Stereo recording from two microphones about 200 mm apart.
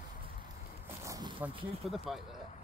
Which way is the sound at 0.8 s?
15° right (ahead or behind).